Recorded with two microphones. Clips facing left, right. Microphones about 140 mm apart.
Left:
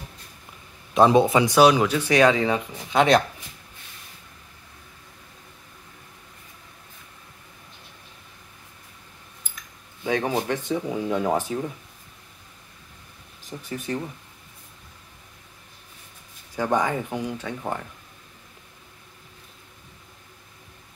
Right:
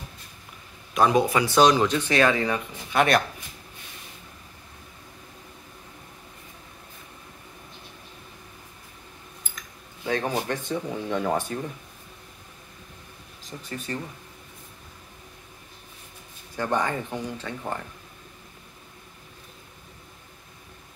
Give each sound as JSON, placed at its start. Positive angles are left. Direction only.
{"t": 0.9, "sound": "speech", "side_deg": 25}
{"t": 1.5, "sound": "speech", "side_deg": 10}
{"t": 10.0, "sound": "speech", "side_deg": 10}
{"t": 13.5, "sound": "speech", "side_deg": 10}
{"t": 16.5, "sound": "speech", "side_deg": 10}